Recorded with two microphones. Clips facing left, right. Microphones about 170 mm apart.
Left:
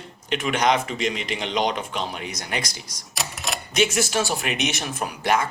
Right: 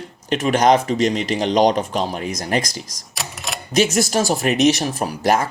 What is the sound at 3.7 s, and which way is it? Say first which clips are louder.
Speech: right 5 dB; 40° right (ahead or behind).